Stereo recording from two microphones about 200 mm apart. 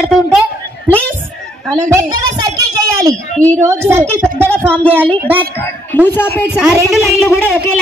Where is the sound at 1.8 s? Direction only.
15° right (ahead or behind).